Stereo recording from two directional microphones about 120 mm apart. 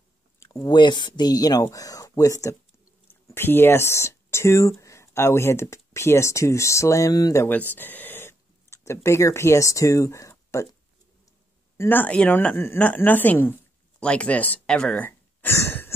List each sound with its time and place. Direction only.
0.7 s speech: 40° left (ahead or behind)
7.4 s a woman's voice: 15° left (ahead or behind)
15.0 s a sound: 20° left (ahead or behind)